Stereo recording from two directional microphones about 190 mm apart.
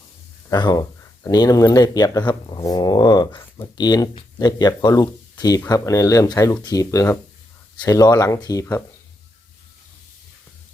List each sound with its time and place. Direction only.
0.5 s speech: 20° left (ahead or behind)